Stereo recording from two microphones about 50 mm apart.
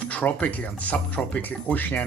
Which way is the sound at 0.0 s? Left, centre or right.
Left.